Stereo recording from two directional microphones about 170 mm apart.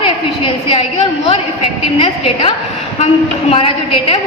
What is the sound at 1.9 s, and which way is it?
A woman's voice, 30° left (ahead or behind).